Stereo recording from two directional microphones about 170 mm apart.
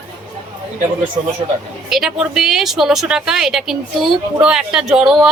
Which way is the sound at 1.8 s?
Centre (ahead or behind).